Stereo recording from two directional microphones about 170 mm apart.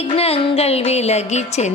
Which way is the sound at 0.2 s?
35° left (ahead or behind).